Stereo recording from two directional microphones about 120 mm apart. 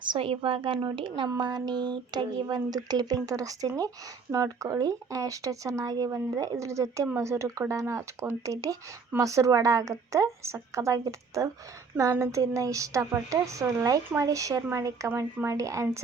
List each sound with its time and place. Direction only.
0.0 s a woman's voice: 45° right (ahead or behind); by 15.9 s 25° right (ahead or behind)